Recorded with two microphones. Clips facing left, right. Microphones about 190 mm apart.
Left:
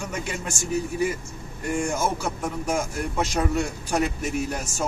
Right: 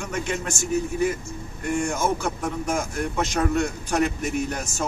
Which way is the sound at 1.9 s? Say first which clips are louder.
Right 1 dB; 5° left (ahead or behind).